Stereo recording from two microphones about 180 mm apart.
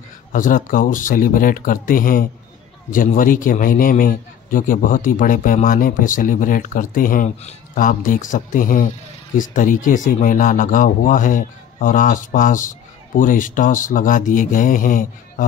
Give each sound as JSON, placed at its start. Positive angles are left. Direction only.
{"t": 0.3, "sound": "speech", "side_deg": 50}